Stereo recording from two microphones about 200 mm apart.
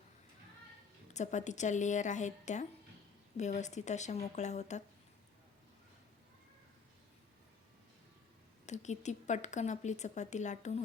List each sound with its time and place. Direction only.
1.1 s speech: 35° left (ahead or behind)
8.6 s speech: 35° left (ahead or behind)